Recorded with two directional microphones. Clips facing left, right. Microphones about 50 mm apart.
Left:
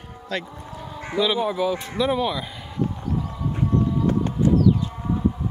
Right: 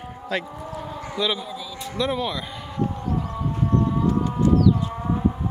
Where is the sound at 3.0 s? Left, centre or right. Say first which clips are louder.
Right 1 dB; right.